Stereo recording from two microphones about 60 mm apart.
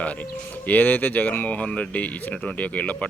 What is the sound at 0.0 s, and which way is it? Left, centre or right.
Speech, left.